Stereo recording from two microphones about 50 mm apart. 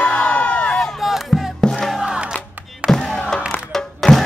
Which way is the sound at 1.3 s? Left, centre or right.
Centre.